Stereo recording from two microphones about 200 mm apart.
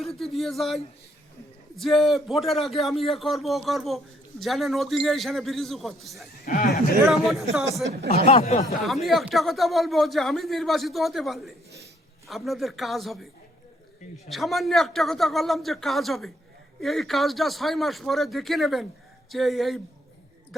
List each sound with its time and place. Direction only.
0.0 s speech: centre (ahead or behind)
6.4 s speech: 45° left (ahead or behind)
7.0 s speech: centre (ahead or behind)
8.3 s speech: 30° left (ahead or behind)
8.8 s speech: centre (ahead or behind)
14.3 s speech: centre (ahead or behind)